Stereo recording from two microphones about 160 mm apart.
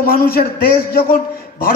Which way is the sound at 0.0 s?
65° left (ahead or behind).